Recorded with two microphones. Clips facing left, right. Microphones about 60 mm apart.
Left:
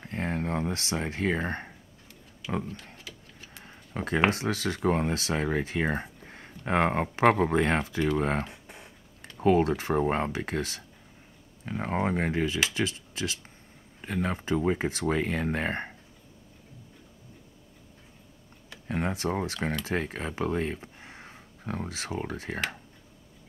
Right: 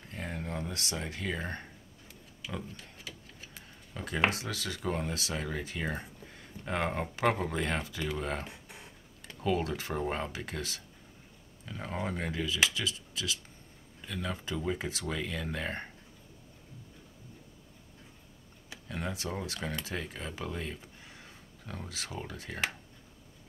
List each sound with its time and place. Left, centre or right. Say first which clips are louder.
0.0 s speech: left 8 dB; left
3.0 s a sound: left 1 dB; centre
3.6 s tick-tock: left 8 dB; left
4.3 s speech: left 8 dB; left
18.9 s speech: left 8 dB; left